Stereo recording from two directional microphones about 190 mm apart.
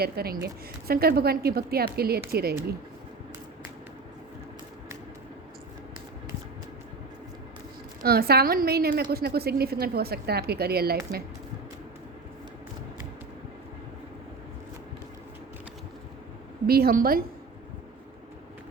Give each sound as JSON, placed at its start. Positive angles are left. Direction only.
{"t": 0.0, "sound": "a woman's voice", "side_deg": -55}
{"t": 8.0, "sound": "a woman's voice", "side_deg": -55}
{"t": 16.6, "sound": "a woman's voice", "side_deg": -55}